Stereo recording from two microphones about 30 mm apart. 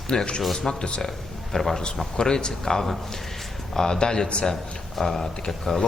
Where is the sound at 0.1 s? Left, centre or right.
Left.